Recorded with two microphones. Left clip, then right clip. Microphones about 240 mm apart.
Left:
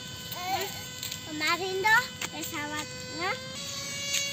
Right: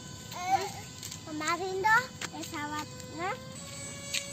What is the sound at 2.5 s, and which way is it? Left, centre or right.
Sheep, centre.